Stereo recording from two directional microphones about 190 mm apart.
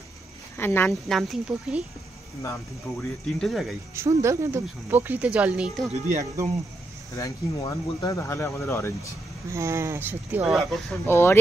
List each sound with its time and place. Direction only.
0.6 s speech: 10° left (ahead or behind)
2.4 s speech: 15° left (ahead or behind)
3.3 s speech: centre (ahead or behind)
3.9 s speech: 15° right (ahead or behind)
7.2 s speech: 20° left (ahead or behind)
9.5 s speech: 15° right (ahead or behind)
11.1 s speech: 15° left (ahead or behind)